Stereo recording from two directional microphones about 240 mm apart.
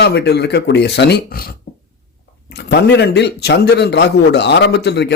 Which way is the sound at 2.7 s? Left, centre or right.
Left.